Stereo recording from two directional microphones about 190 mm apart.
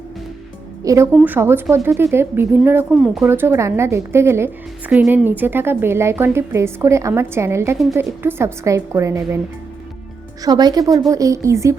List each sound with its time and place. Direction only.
0.9 s speech: 10° right (ahead or behind)
10.4 s a woman's voice: 20° right (ahead or behind)